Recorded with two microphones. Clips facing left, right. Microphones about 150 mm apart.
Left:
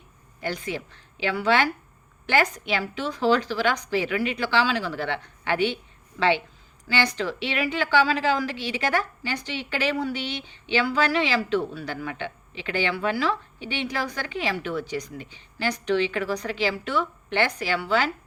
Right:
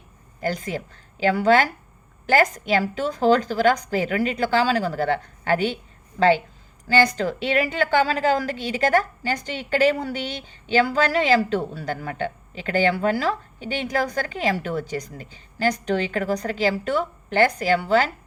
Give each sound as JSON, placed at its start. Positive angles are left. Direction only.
{"t": 0.3, "sound": "a woman's voice", "side_deg": -40}